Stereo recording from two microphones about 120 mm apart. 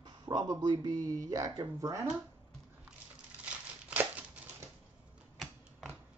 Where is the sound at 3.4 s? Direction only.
15° right (ahead or behind).